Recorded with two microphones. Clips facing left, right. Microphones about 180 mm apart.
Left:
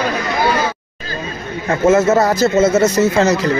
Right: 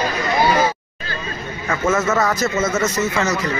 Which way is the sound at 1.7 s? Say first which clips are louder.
Left 7 dB; 30° left (ahead or behind).